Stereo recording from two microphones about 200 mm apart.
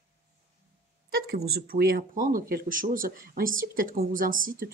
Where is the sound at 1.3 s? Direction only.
50° right (ahead or behind).